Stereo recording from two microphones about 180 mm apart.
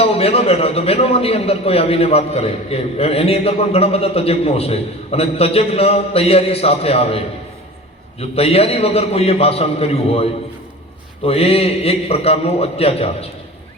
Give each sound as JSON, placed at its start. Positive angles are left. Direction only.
{"t": 0.0, "sound": "a man's voice", "side_deg": 35}
{"t": 11.3, "sound": "a man's voice", "side_deg": 35}